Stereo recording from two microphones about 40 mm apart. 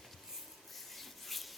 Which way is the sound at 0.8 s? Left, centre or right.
Centre.